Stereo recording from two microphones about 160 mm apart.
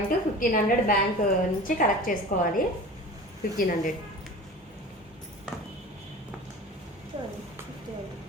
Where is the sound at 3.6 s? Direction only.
60° left (ahead or behind).